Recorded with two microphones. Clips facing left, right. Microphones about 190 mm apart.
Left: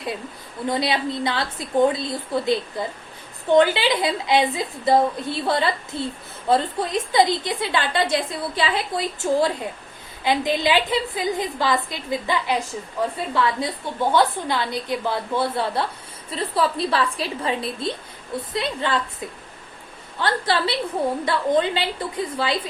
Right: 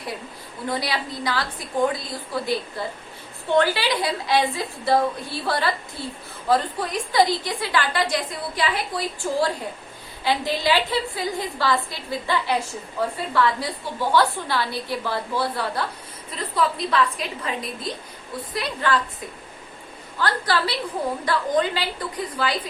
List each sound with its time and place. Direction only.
0.7 s a woman's voice: 25° left (ahead or behind)
20.1 s a woman's voice: 25° left (ahead or behind)